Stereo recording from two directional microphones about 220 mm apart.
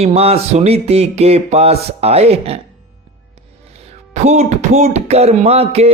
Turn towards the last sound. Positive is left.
turn(degrees=-30)  # may be behind; listen again after turning